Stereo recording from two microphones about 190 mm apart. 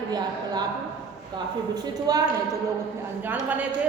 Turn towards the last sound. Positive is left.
turn(degrees=-10)  # may be behind; listen again after turning